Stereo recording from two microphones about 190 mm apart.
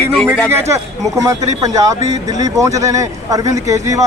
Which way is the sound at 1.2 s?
20° right (ahead or behind).